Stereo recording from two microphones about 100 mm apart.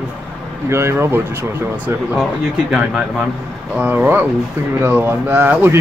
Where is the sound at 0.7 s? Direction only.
25° right (ahead or behind).